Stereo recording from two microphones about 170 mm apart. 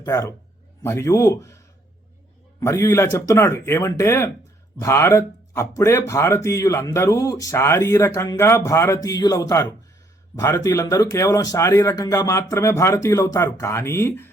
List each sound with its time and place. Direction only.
0.0 s a man's voice: 20° left (ahead or behind)